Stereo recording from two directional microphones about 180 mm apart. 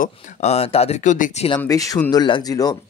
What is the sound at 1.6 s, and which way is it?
Speech, 20° left (ahead or behind).